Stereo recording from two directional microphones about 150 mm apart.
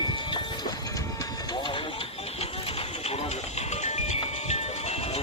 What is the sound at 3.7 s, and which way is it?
Music, 45° left (ahead or behind).